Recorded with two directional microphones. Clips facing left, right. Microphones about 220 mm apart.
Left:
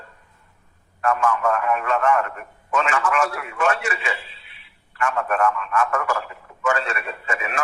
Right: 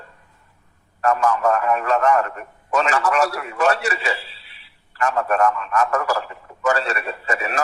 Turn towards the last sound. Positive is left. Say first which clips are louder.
# right 3 dB
turn(degrees=-40)  # may be behind; listen again after turning